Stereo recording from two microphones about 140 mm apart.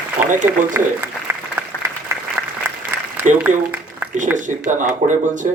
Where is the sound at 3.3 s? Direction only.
60° right (ahead or behind).